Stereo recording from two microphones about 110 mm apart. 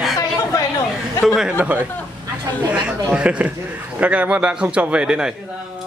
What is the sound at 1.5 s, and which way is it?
A man's voice, 15° right (ahead or behind).